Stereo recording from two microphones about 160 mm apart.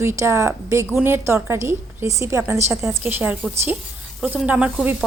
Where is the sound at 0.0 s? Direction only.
15° right (ahead or behind).